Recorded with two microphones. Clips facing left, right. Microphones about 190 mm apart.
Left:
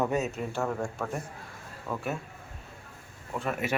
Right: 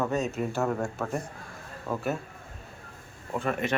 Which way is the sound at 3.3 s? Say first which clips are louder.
Right 2 dB; 5° left (ahead or behind).